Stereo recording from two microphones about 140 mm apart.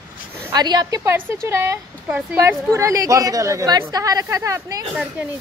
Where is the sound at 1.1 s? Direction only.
15° right (ahead or behind).